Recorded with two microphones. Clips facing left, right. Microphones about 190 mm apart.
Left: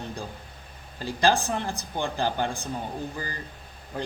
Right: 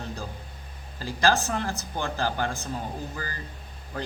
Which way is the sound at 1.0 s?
15° left (ahead or behind).